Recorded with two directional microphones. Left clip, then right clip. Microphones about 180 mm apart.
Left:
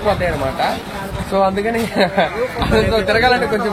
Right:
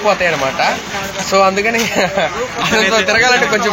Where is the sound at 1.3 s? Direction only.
20° right (ahead or behind).